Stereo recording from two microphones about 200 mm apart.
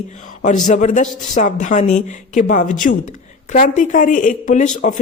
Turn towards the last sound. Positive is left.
turn(degrees=40)  # may be behind; listen again after turning